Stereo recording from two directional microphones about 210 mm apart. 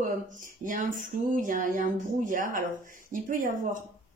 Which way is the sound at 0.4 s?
40° right (ahead or behind).